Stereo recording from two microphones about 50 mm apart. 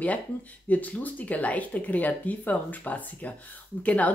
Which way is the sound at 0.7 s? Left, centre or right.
Left.